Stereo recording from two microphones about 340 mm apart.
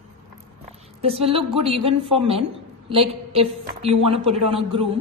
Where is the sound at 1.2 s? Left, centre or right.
Centre.